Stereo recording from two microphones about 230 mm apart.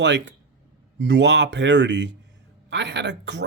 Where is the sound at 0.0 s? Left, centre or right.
Right.